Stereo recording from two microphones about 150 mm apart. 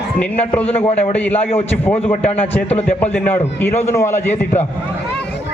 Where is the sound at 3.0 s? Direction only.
15° left (ahead or behind).